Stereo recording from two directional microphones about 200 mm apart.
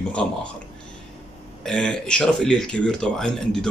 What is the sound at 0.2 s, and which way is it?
Speech, 5° left (ahead or behind).